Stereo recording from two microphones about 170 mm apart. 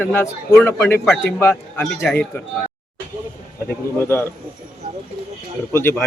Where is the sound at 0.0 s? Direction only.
15° left (ahead or behind).